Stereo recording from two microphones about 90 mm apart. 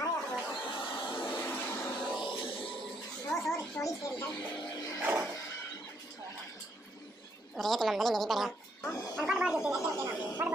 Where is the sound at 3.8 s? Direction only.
25° left (ahead or behind).